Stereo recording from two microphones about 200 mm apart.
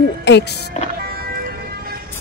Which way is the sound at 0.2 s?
60° left (ahead or behind).